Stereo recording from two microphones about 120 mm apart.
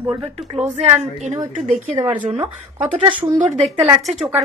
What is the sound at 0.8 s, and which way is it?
Speech, 75° right (ahead or behind).